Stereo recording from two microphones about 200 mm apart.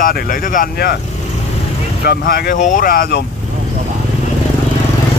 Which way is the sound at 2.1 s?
50° left (ahead or behind).